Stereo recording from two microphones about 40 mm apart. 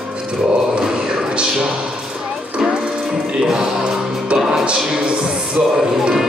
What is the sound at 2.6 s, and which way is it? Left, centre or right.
Music, centre.